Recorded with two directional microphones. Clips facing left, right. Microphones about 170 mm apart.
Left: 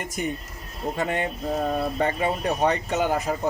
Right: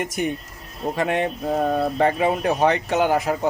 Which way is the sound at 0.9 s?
75° right (ahead or behind).